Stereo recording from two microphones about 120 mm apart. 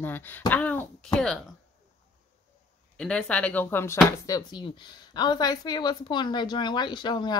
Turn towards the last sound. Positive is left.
turn(degrees=40)  # may be behind; listen again after turning